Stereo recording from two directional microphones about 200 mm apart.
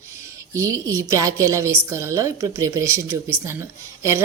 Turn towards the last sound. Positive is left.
turn(degrees=-15)  # may be behind; listen again after turning